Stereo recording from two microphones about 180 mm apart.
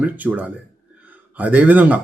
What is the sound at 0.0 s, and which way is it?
Speech, 10° right (ahead or behind).